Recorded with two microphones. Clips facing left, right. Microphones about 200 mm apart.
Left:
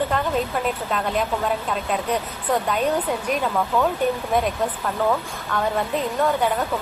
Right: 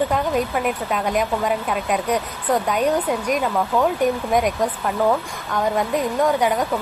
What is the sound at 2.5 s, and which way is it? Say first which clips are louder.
Speech: right 2 dB; 10° right (ahead or behind).